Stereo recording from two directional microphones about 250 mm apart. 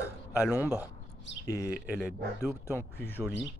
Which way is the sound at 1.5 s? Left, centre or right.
Centre.